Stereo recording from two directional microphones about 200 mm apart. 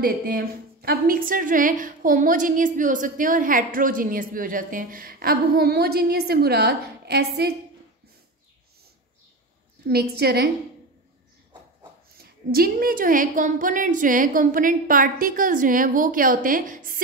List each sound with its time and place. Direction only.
0.0 s a woman's voice: 45° right (ahead or behind)
9.8 s a woman's voice: 50° right (ahead or behind)
12.4 s a woman's voice: 50° right (ahead or behind)